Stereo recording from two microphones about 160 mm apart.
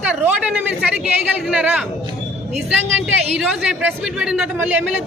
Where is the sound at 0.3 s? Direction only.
10° right (ahead or behind).